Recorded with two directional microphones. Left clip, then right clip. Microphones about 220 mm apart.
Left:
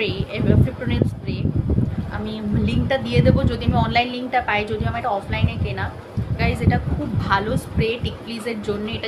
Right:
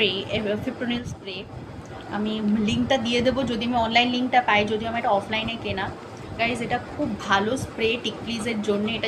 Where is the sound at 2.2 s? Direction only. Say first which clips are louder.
Right 1 dB; 10° left (ahead or behind).